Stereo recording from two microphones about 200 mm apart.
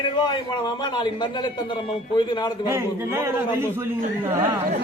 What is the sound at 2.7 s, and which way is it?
A man's voice, 10° right (ahead or behind).